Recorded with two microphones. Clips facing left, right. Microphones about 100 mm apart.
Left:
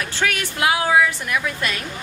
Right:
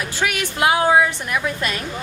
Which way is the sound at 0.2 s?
10° right (ahead or behind).